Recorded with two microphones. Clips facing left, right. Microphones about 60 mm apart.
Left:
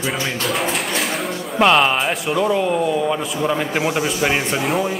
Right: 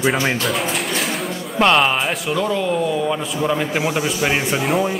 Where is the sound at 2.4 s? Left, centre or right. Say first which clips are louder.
Left 2 dB; centre.